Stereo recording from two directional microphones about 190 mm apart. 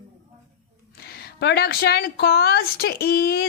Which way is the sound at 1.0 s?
55° left (ahead or behind).